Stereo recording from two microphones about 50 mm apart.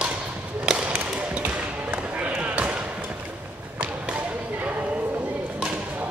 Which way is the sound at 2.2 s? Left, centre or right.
Right.